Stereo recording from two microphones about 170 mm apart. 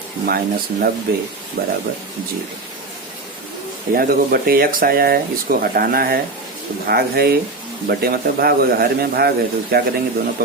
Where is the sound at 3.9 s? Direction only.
60° right (ahead or behind).